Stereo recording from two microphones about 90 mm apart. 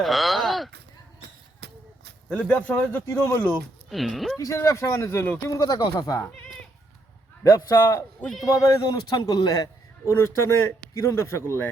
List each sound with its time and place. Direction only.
0.0 s a sound: centre (ahead or behind)
2.3 s speech: 15° left (ahead or behind)
2.9 s speech: 30° left (ahead or behind)
3.8 s speech: centre (ahead or behind)
4.4 s a man's voice: 35° left (ahead or behind)
5.5 s a man's voice: 40° left (ahead or behind)
6.2 s speech: 15° left (ahead or behind)
7.4 s a man's voice: 35° left (ahead or behind)
8.4 s a man's voice: 40° left (ahead or behind)
10.1 s a man's voice: 30° left (ahead or behind)